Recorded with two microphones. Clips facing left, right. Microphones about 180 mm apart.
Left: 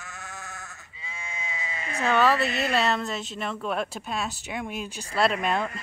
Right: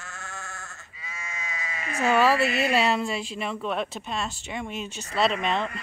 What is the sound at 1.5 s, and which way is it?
Bleat, 25° left (ahead or behind).